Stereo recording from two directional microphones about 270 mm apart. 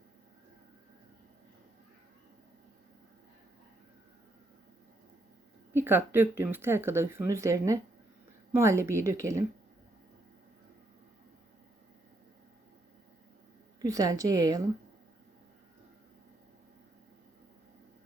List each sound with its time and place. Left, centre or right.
5.7 s speech: centre
13.8 s speech: centre